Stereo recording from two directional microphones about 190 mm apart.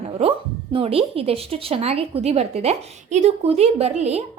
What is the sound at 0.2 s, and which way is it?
Speech, 30° right (ahead or behind).